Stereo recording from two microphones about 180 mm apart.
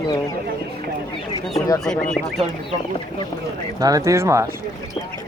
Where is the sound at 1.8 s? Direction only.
5° left (ahead or behind).